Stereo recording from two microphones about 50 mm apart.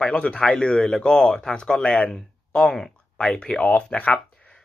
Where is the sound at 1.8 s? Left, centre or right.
Left.